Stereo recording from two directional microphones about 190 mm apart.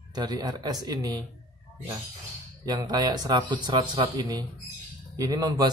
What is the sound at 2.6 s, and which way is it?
A man's voice, 20° right (ahead or behind).